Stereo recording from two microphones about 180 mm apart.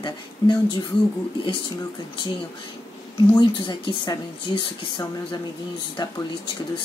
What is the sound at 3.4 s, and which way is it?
Speech, 25° left (ahead or behind).